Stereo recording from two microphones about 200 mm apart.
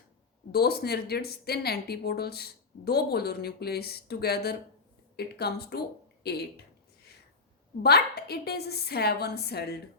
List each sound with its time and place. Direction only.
0.5 s speech: 50° left (ahead or behind)
7.8 s speech: 55° left (ahead or behind)